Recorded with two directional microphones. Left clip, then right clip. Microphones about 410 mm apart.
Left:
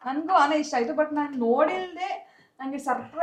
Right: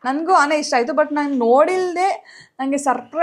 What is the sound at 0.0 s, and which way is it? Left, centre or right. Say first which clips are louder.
A woman's voice: right 6 dB; right.